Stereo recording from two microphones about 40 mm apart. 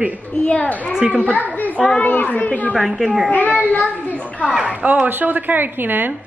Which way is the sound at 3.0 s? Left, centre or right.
Centre.